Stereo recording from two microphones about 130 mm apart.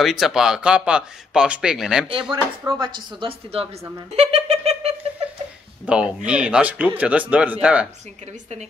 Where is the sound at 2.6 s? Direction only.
30° right (ahead or behind); by 3.8 s 50° right (ahead or behind).